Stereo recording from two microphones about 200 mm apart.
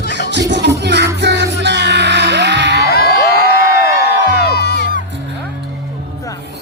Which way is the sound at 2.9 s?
50° left (ahead or behind).